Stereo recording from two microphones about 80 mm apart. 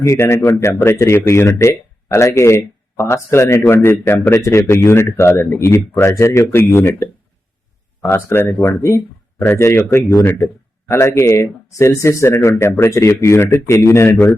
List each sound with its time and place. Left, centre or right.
0.1 s speech: left
4.4 s speech: left